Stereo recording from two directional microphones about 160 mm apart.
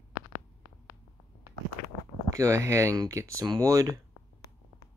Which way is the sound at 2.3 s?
20° right (ahead or behind).